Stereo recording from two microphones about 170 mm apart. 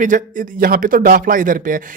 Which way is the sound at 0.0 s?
50° right (ahead or behind).